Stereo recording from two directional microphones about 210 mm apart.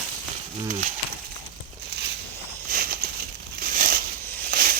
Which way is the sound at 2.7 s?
45° right (ahead or behind).